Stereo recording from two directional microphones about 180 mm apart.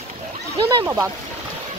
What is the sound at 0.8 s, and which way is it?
Speech, 15° right (ahead or behind).